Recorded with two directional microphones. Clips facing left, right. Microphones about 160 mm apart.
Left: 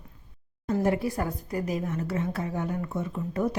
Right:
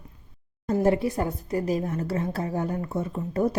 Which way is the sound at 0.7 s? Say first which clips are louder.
Right 3 dB; 25° right (ahead or behind).